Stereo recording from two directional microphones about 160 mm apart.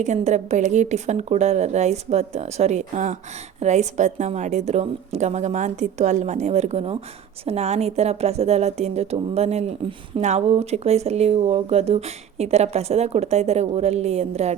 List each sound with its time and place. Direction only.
0.0 s a woman's voice: 45° right (ahead or behind)